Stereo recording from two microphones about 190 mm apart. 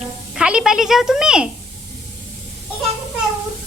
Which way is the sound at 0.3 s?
5° right (ahead or behind).